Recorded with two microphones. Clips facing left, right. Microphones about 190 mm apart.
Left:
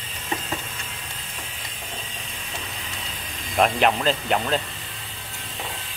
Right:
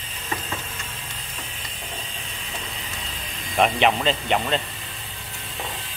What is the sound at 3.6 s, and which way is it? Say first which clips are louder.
Speech: even; centre (ahead or behind).